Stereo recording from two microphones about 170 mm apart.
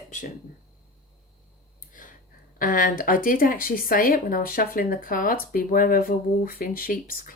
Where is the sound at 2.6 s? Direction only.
55° left (ahead or behind).